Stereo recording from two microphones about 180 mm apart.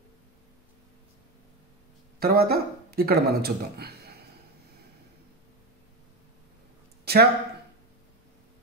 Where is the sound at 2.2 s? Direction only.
55° right (ahead or behind).